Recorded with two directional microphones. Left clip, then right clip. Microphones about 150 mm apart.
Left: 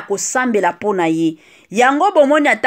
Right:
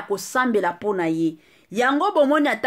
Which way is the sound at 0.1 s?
20° left (ahead or behind).